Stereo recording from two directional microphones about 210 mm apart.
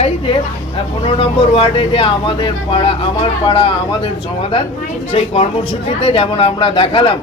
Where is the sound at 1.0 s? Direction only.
25° left (ahead or behind).